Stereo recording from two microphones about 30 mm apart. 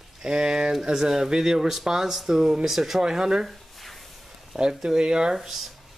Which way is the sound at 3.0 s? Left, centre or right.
Right.